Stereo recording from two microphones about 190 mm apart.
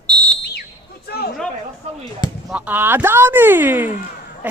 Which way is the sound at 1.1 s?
55° left (ahead or behind).